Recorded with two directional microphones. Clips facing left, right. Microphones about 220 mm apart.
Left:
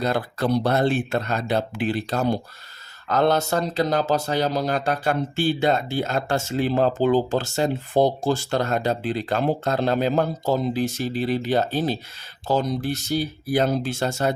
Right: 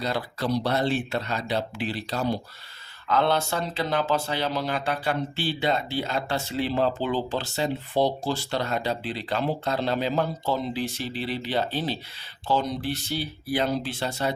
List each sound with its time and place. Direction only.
0.0 s speech: 50° left (ahead or behind)